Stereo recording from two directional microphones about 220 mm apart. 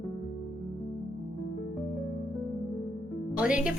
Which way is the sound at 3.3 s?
5° right (ahead or behind).